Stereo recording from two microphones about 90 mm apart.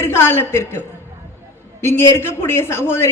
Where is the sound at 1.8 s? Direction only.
25° left (ahead or behind).